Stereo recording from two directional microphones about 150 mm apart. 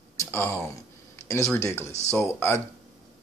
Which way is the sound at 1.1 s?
20° left (ahead or behind).